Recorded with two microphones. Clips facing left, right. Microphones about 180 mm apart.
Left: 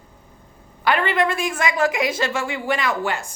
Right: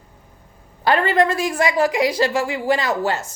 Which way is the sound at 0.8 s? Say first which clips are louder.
Right 3 dB; 40° right (ahead or behind).